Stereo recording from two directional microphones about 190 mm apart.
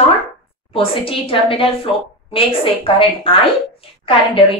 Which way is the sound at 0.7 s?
30° left (ahead or behind).